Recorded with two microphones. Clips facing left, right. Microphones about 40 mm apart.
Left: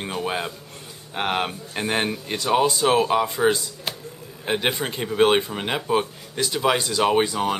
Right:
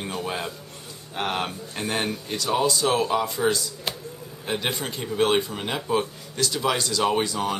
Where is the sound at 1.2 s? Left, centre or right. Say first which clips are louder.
Left 3 dB; centre.